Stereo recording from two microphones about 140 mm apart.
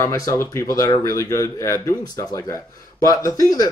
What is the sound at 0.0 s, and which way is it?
Speech, 20° left (ahead or behind).